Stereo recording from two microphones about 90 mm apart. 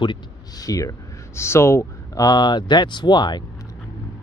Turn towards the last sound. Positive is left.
turn(degrees=55)  # may be behind; listen again after turning